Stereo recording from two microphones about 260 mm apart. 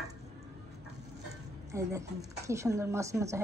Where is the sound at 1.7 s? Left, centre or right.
Centre.